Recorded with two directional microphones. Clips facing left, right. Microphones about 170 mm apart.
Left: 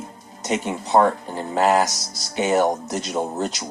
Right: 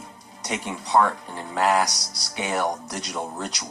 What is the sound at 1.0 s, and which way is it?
Speech, 40° left (ahead or behind).